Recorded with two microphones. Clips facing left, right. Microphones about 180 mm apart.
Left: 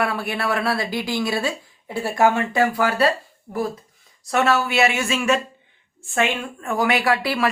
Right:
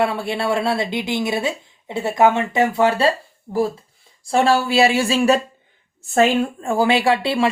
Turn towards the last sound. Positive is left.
turn(degrees=-25)  # may be behind; listen again after turning